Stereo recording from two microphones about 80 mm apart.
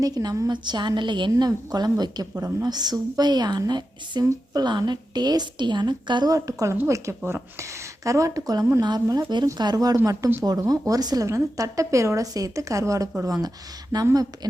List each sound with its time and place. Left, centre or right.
0.0 s a woman's voice: right
1.5 s a woman's voice: right
4.2 s a woman's voice: right
4.6 s a woman's voice: right
6.3 s a woman's voice: right